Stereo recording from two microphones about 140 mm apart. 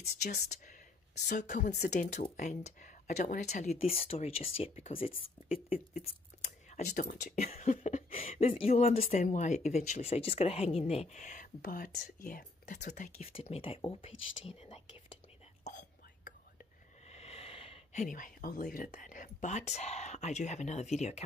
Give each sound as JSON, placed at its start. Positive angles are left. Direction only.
{"t": 1.2, "sound": "speech", "side_deg": 65}
{"t": 6.7, "sound": "speech", "side_deg": 60}
{"t": 7.3, "sound": "speech", "side_deg": 50}
{"t": 9.2, "sound": "speech", "side_deg": 60}
{"t": 17.1, "sound": "a sound", "side_deg": 45}
{"t": 17.9, "sound": "speech", "side_deg": 70}